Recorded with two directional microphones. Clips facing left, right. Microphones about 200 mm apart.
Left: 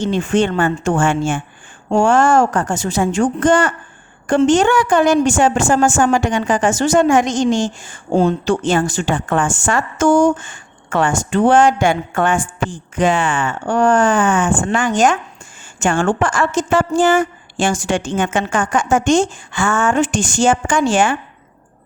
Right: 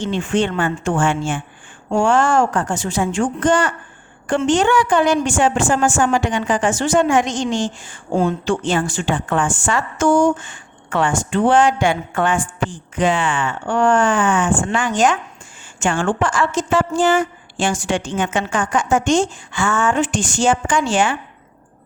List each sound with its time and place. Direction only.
0.0 s a woman's voice: 40° left (ahead or behind)